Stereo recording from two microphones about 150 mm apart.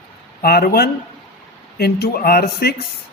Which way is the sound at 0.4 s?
90° left.